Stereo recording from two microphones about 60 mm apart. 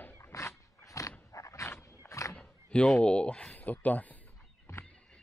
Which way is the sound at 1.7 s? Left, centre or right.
Left.